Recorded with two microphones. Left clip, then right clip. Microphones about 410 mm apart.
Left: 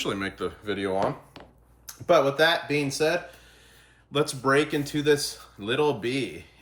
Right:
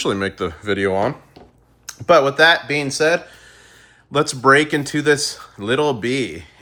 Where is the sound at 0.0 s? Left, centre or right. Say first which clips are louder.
Right 8 dB; centre.